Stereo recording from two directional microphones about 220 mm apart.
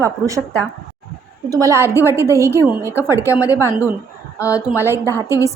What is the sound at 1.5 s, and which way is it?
Speech, 15° right (ahead or behind).